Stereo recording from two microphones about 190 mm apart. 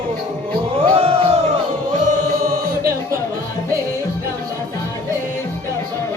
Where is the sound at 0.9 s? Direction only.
35° right (ahead or behind).